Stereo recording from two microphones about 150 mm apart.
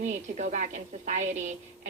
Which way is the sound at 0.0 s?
55° right (ahead or behind).